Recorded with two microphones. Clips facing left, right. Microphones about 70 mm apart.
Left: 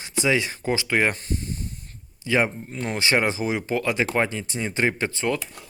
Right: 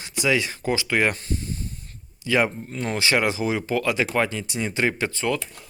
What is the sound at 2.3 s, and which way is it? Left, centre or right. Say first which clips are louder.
Speech: right 1 dB; left.